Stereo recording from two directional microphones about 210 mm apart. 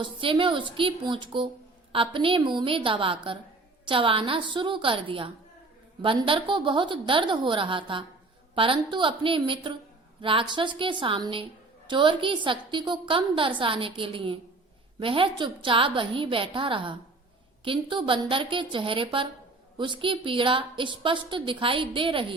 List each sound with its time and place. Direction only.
0.0 s a woman's voice: 25° right (ahead or behind)